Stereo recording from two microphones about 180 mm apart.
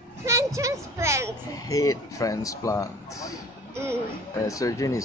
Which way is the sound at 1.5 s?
20° left (ahead or behind).